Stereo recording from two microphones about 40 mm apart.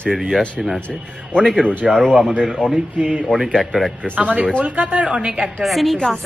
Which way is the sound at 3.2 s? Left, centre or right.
Centre.